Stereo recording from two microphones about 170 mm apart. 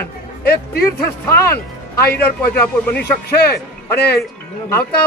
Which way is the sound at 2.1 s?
10° left (ahead or behind).